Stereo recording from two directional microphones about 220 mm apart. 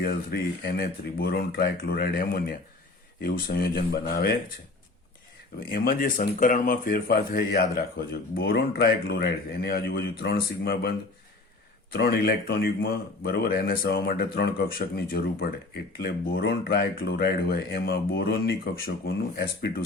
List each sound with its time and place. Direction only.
0.0 s speech: 45° left (ahead or behind)
5.5 s speech: 40° left (ahead or behind)